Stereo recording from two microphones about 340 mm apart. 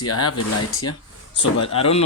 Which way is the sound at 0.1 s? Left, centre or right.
Left.